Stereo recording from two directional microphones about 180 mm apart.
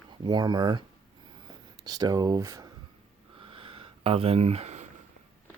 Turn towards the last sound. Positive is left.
turn(degrees=-40)  # may be behind; listen again after turning